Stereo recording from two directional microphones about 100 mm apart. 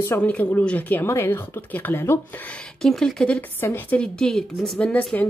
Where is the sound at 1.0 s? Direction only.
25° left (ahead or behind).